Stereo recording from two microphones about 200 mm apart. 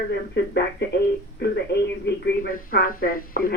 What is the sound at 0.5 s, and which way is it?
Speech, 55° left (ahead or behind).